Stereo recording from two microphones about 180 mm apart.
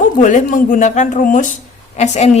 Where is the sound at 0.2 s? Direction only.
45° left (ahead or behind).